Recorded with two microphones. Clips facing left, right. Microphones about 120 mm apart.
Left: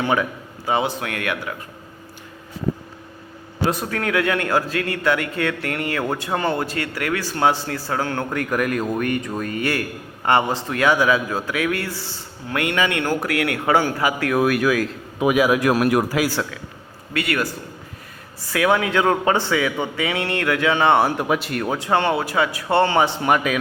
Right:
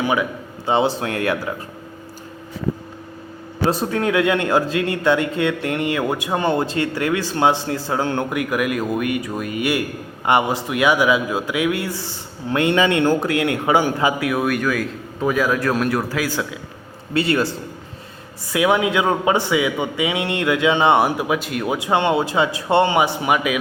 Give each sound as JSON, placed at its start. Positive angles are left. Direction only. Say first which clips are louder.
{"t": 0.0, "sound": "a man's voice", "louder": "right 1 dB", "side_deg": -10}
{"t": 0.6, "sound": "a man's voice", "louder": "right 3 dB", "side_deg": -30}
{"t": 3.7, "sound": "a man's voice", "louder": "right 4 dB", "side_deg": -25}
{"t": 8.3, "sound": "a man's voice", "louder": "right 1 dB", "side_deg": -10}
{"t": 14.2, "sound": "a man's voice", "louder": "left 2 dB", "side_deg": -5}
{"t": 17.2, "sound": "a man's voice", "louder": "right 4 dB", "side_deg": -30}
{"t": 18.5, "sound": "a man's voice", "louder": "right 1 dB", "side_deg": -15}
{"t": 21.2, "sound": "speech", "louder": "even", "side_deg": 0}
{"t": 21.8, "sound": "a man's voice", "louder": "right 2 dB", "side_deg": -15}